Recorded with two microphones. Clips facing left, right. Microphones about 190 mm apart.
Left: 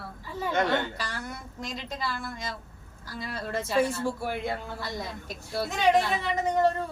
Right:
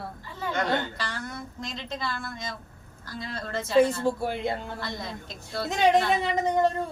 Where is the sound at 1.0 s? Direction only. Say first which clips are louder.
Right 1 dB; 10° left (ahead or behind).